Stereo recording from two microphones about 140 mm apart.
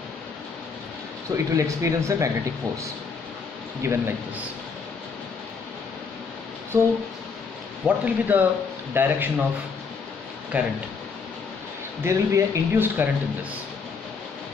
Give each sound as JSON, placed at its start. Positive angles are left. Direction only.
{"t": 1.3, "sound": "speech", "side_deg": -20}
{"t": 3.8, "sound": "speech", "side_deg": -20}
{"t": 6.7, "sound": "speech", "side_deg": -20}
{"t": 7.8, "sound": "speech", "side_deg": -10}
{"t": 10.5, "sound": "speech", "side_deg": -10}
{"t": 12.0, "sound": "speech", "side_deg": -20}